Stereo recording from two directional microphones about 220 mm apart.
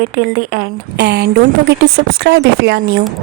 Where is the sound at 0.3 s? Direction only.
45° right (ahead or behind).